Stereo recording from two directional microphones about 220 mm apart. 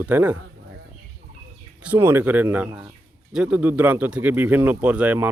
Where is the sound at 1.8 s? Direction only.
10° right (ahead or behind).